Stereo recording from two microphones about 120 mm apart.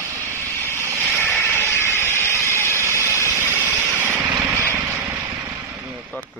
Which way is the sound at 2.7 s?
25° right (ahead or behind).